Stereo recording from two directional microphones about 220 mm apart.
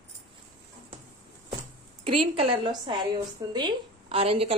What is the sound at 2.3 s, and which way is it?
A woman's voice, 25° right (ahead or behind).